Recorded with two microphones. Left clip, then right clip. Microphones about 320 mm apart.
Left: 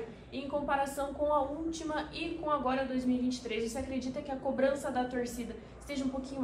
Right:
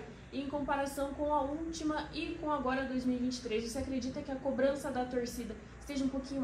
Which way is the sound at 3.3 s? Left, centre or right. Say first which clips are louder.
Left 1 dB; left.